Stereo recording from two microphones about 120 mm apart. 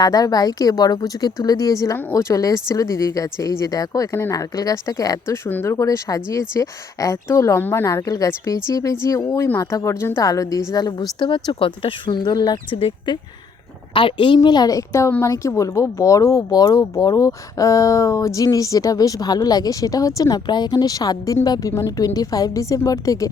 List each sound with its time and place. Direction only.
0.0 s a woman's voice: 30° left (ahead or behind)